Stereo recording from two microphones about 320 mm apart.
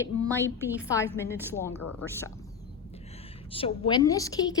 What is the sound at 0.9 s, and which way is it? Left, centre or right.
A woman's voice, centre.